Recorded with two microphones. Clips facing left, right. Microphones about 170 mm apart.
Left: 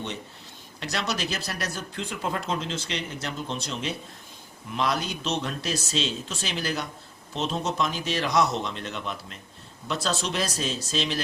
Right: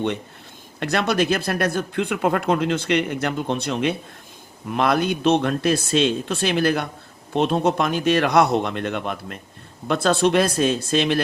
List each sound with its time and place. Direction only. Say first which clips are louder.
0.8 s speech: right 9 dB; 55° right (ahead or behind)